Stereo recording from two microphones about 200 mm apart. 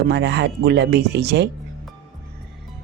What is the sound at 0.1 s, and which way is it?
Speech, 60° right (ahead or behind).